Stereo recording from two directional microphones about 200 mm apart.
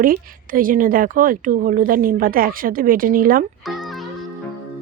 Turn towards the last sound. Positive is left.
turn(degrees=-45)  # may be behind; listen again after turning